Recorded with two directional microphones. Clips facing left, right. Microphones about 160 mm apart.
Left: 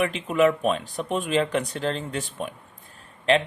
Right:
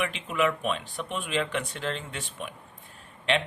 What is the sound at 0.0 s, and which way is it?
Speech, 40° left (ahead or behind).